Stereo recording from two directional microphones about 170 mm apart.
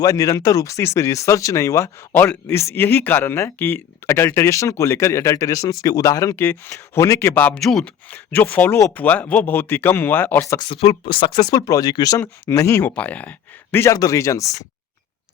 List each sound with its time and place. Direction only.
0.0 s speech: 20° left (ahead or behind)
10.7 s speech: 35° left (ahead or behind); by 14.6 s 20° left (ahead or behind)